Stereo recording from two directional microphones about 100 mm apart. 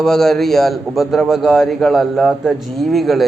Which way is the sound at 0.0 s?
5° left (ahead or behind).